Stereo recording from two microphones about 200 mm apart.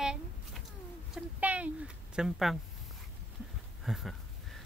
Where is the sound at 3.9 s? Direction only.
Centre (ahead or behind).